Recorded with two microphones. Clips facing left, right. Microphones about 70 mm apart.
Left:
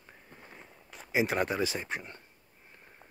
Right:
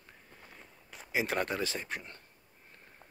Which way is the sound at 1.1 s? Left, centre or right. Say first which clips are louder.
Left 3 dB; centre.